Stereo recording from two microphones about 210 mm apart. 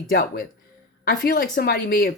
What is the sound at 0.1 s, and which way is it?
Speech, 45° left (ahead or behind).